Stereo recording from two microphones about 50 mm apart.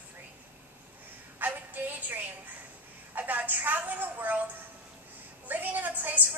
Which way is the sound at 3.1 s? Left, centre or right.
Right.